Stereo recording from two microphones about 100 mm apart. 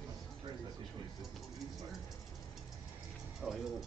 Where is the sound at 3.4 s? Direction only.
Centre (ahead or behind).